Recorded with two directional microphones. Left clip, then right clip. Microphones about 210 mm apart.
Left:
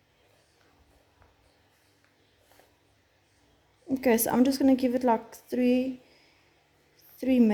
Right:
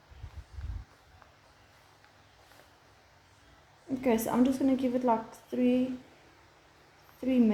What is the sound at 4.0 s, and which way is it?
A woman's voice, 55° left (ahead or behind).